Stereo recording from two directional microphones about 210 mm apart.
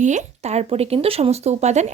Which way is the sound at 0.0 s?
35° right (ahead or behind).